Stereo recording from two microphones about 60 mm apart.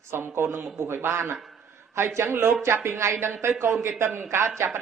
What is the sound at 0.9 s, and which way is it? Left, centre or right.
A man's voice, right.